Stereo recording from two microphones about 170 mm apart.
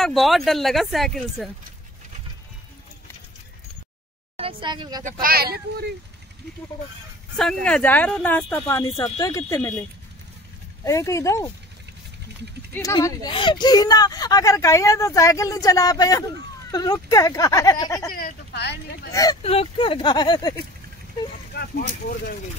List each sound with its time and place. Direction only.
0.0 s speech: centre (ahead or behind)
4.4 s speech: 30° right (ahead or behind)
5.2 s speech: 65° right (ahead or behind)
7.6 s speech: 10° left (ahead or behind)
12.7 s speech: 20° left (ahead or behind)
18.1 s speech: 70° left (ahead or behind)
19.4 s speech: 35° left (ahead or behind)